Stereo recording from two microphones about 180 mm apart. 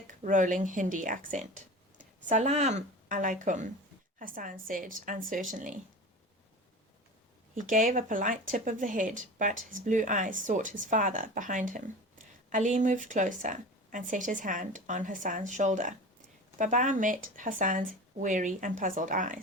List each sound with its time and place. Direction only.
0.1 s a woman's voice: 45° right (ahead or behind)
7.5 s a woman's voice: 45° right (ahead or behind)